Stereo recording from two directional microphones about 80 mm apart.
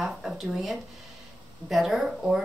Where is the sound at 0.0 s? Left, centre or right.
Centre.